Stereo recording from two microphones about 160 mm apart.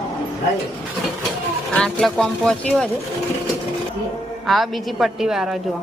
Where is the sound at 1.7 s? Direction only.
5° left (ahead or behind).